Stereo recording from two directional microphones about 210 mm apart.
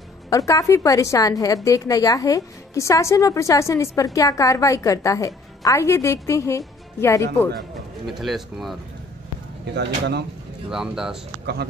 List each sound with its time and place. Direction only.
0.3 s a woman's voice: 15° left (ahead or behind)
8.1 s speech: centre (ahead or behind)
9.8 s speech: 55° right (ahead or behind)
10.7 s speech: 5° right (ahead or behind)